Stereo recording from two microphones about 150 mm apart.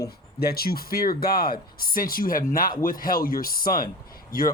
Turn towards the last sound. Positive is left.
turn(degrees=70)  # may be behind; listen again after turning